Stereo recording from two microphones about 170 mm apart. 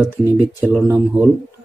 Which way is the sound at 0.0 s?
10° right (ahead or behind).